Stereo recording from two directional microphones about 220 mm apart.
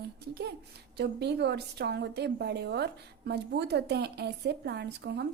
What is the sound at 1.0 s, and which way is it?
Speech, 50° right (ahead or behind).